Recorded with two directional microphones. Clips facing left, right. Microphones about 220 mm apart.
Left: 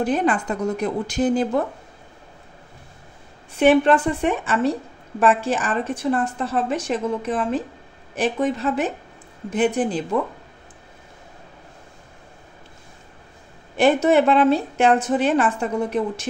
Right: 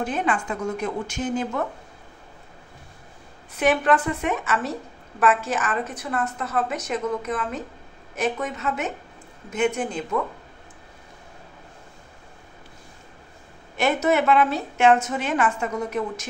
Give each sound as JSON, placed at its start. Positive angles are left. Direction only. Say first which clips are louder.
{"t": 0.0, "sound": "a woman's voice", "louder": "left 5 dB", "side_deg": 35}
{"t": 3.5, "sound": "a woman's voice", "louder": "left 5 dB", "side_deg": 30}
{"t": 13.7, "sound": "a woman's voice", "louder": "left 5 dB", "side_deg": 30}